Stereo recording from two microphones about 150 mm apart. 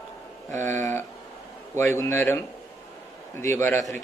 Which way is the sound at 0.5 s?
55° right (ahead or behind).